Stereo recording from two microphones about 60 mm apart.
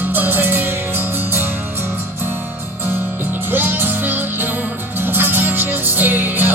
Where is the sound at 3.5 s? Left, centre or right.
Right.